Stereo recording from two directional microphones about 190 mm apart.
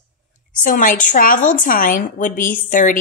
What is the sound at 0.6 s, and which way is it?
A woman's voice, 45° left (ahead or behind).